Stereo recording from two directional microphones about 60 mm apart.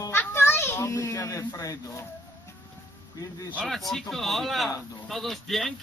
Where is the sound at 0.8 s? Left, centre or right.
Left.